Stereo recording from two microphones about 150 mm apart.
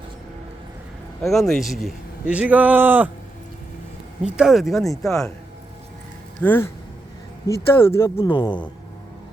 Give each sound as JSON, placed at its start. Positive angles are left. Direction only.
{"t": 1.2, "sound": "a man's voice", "side_deg": 0}
{"t": 4.2, "sound": "speech", "side_deg": -5}
{"t": 6.4, "sound": "speech", "side_deg": 10}
{"t": 8.3, "sound": "speech", "side_deg": 30}